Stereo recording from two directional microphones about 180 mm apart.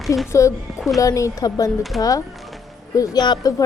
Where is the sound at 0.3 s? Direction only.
15° left (ahead or behind).